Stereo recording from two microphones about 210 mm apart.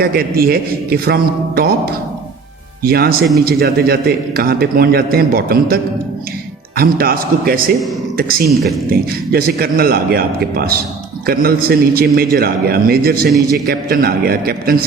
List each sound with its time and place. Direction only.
0.0 s a man's voice: 45° right (ahead or behind)
8.9 s a man's voice: 45° right (ahead or behind)